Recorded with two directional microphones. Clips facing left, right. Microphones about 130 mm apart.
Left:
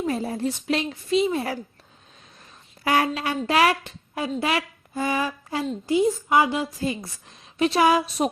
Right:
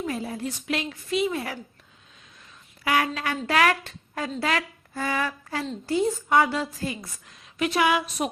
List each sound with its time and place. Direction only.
0.0 s a woman's voice: 35° left (ahead or behind)
2.8 s a woman's voice: 35° left (ahead or behind)
3.2 s a woman's voice: 20° left (ahead or behind)
6.9 s a woman's voice: 30° left (ahead or behind)